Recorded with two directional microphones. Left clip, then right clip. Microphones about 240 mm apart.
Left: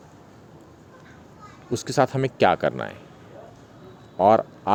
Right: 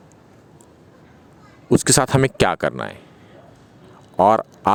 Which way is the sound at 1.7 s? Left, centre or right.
Right.